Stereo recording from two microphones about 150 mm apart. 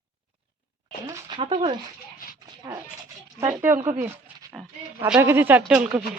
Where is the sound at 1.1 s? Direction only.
30° right (ahead or behind).